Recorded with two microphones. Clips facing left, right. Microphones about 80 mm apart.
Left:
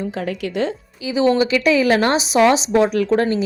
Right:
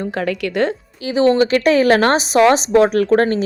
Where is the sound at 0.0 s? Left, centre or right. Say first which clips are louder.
Right 3 dB; right.